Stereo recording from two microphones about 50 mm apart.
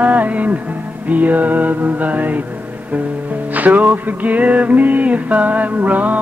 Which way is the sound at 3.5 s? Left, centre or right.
Right.